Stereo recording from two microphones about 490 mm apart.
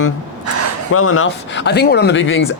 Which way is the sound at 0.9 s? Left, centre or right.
Left.